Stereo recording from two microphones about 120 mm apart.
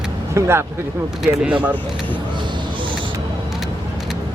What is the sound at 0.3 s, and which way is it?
Speech, 20° right (ahead or behind).